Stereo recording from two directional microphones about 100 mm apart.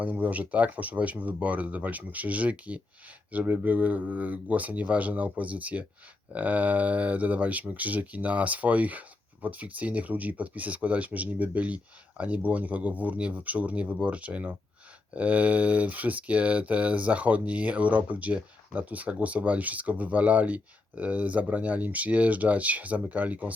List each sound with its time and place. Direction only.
0.0 s speech: 15° right (ahead or behind)